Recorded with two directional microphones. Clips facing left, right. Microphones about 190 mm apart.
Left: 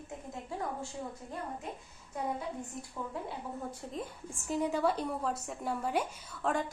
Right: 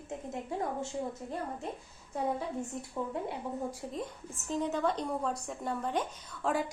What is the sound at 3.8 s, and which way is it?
Speech, 10° right (ahead or behind).